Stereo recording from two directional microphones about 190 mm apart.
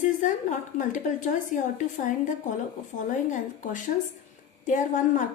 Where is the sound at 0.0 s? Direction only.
40° left (ahead or behind).